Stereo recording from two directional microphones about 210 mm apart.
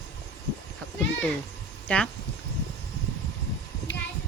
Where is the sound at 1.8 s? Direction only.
5° left (ahead or behind).